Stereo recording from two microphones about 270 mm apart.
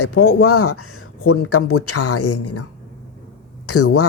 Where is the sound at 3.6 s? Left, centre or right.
Left.